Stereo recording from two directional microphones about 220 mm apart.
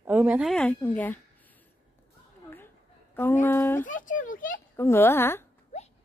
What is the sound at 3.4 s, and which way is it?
Speech, 10° left (ahead or behind).